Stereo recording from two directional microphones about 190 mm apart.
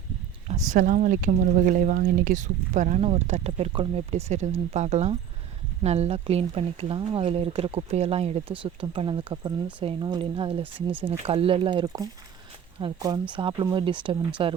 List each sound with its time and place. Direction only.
0.4 s speech: 40° right (ahead or behind)
10.6 s speech: 10° right (ahead or behind)
11.2 s speech: 30° right (ahead or behind)